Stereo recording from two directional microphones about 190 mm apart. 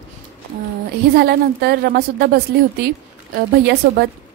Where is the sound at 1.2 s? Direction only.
55° right (ahead or behind).